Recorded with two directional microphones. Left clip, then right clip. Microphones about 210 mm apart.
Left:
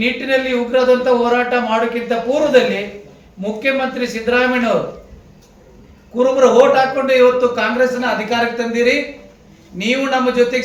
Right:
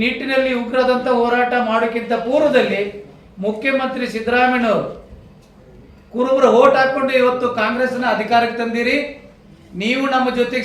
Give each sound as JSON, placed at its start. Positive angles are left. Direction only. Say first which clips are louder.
{"t": 0.0, "sound": "a man's voice", "louder": "left 1 dB", "side_deg": 0}
{"t": 6.1, "sound": "a man's voice", "louder": "left 2 dB", "side_deg": 0}